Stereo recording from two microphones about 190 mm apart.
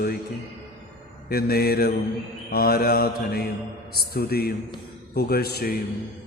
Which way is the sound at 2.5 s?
55° left (ahead or behind).